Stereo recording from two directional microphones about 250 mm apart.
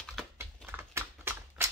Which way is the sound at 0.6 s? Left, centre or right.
Centre.